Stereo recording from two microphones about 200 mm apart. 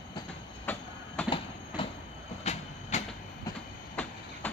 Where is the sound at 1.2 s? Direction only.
25° left (ahead or behind).